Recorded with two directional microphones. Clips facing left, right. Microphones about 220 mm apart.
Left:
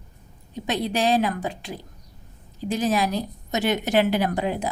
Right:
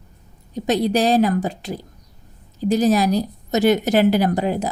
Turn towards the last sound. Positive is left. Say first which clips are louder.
# right 5 dB
turn(degrees=-40)  # may be behind; listen again after turning